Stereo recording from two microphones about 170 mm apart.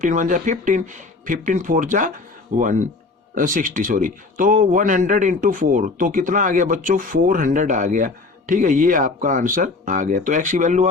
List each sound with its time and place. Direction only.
0.0 s a man's voice: 50° right (ahead or behind)